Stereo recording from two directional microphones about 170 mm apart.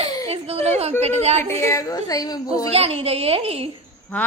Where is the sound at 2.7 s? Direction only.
35° right (ahead or behind).